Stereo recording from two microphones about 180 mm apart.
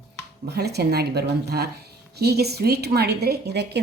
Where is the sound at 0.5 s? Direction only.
65° right (ahead or behind).